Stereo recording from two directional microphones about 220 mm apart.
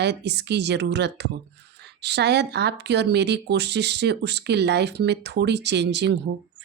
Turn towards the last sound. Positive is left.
turn(degrees=-50)  # may be behind; listen again after turning